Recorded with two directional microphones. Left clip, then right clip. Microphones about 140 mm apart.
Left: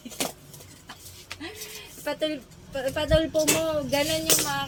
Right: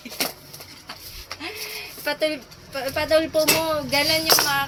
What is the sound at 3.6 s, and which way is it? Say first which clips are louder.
Tambourine: right 4 dB; 15° left (ahead or behind).